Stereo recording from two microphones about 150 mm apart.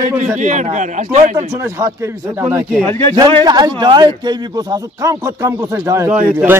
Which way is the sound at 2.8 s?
15° left (ahead or behind).